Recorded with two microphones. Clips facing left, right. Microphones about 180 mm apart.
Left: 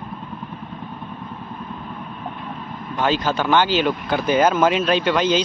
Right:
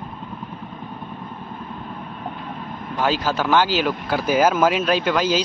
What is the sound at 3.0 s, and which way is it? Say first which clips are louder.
Speech: left 1 dB; 5° right (ahead or behind).